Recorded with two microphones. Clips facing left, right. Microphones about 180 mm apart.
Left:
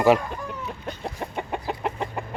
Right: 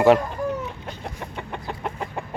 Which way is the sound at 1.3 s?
10° left (ahead or behind).